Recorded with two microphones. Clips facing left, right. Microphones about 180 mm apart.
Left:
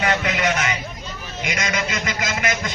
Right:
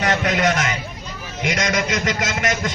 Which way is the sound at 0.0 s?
40° right (ahead or behind).